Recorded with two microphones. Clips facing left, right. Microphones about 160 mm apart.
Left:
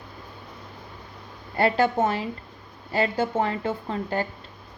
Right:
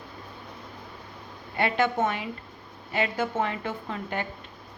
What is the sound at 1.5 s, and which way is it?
A woman's voice, 35° left (ahead or behind).